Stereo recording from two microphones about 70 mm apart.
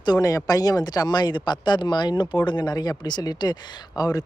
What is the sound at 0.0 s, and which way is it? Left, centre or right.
Speech, left.